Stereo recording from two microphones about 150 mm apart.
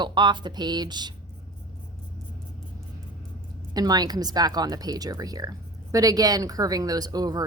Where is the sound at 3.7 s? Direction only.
25° right (ahead or behind).